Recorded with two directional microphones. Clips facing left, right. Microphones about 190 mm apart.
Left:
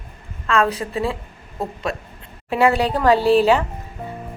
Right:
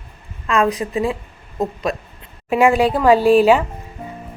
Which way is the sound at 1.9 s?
25° left (ahead or behind).